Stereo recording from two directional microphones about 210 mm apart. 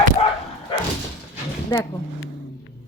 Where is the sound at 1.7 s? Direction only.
15° left (ahead or behind).